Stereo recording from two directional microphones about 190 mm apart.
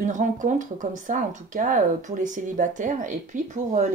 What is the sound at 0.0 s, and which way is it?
Speech, 40° right (ahead or behind).